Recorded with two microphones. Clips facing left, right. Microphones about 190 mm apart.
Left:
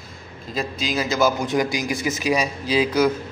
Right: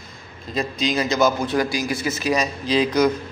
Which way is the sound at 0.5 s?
5° left (ahead or behind).